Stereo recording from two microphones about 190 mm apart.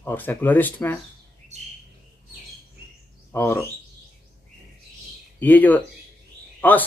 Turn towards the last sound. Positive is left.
turn(degrees=10)  # may be behind; listen again after turning